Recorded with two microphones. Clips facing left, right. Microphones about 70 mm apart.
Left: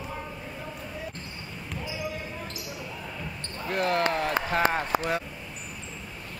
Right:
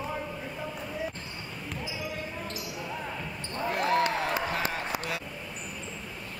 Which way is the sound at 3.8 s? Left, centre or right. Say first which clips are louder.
Left 1 dB; left.